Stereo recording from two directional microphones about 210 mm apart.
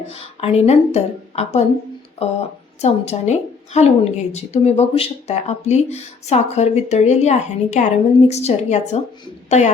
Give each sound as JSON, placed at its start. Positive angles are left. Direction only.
{"t": 0.1, "sound": "a woman's voice", "side_deg": 30}
{"t": 2.8, "sound": "a woman's voice", "side_deg": 30}